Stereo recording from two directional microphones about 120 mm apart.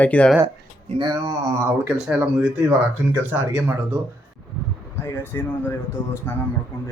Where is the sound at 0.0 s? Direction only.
10° left (ahead or behind).